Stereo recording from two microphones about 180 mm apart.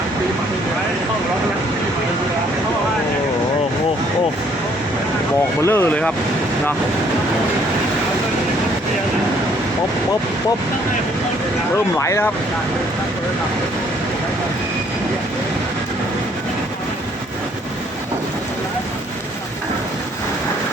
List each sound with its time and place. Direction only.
5.6 s speech: 15° left (ahead or behind)
11.9 s speech: 15° left (ahead or behind)